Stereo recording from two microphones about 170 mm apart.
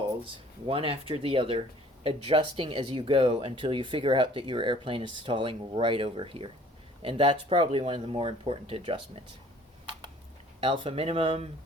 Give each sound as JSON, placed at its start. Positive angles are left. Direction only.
{"t": 0.7, "sound": "speech", "side_deg": -35}
{"t": 10.6, "sound": "speech", "side_deg": -35}